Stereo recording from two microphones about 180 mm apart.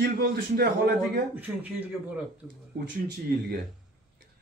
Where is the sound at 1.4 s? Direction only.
10° right (ahead or behind).